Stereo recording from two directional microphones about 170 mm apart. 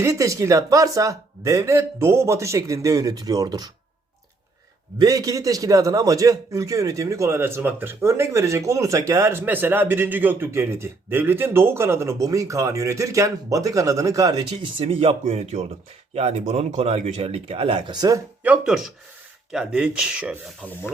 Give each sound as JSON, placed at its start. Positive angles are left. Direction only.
{"t": 0.0, "sound": "a man's voice", "side_deg": -20}
{"t": 4.9, "sound": "a man's voice", "side_deg": -20}
{"t": 18.4, "sound": "speech", "side_deg": -5}